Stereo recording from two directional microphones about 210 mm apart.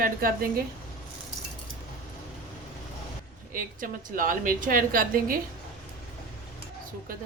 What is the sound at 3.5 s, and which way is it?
A woman's voice, 40° right (ahead or behind).